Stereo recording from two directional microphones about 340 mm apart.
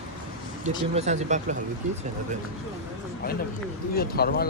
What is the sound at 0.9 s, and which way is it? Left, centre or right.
Speech, centre.